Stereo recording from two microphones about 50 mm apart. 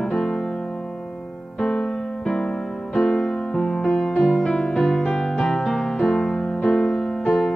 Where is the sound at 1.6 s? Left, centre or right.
Centre.